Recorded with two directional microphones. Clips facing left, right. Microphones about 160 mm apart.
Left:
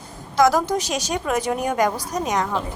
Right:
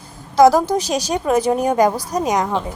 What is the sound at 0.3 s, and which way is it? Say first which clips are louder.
A woman's voice: right 5 dB; 30° right (ahead or behind).